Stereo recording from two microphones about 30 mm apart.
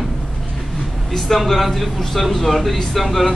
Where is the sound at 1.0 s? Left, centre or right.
Centre.